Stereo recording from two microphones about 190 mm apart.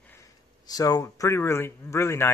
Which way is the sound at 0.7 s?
20° left (ahead or behind).